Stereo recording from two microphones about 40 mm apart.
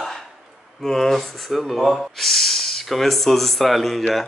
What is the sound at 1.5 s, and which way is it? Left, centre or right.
Speech, centre.